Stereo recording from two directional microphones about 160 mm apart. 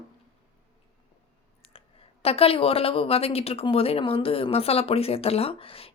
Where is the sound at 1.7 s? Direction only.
35° left (ahead or behind).